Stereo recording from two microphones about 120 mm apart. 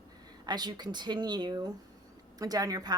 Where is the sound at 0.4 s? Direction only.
35° right (ahead or behind).